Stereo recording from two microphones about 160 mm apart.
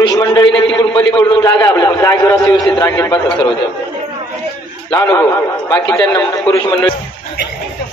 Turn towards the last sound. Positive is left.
turn(degrees=10)  # may be behind; listen again after turning